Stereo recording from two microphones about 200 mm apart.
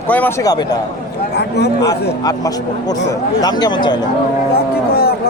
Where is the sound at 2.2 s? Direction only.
20° left (ahead or behind).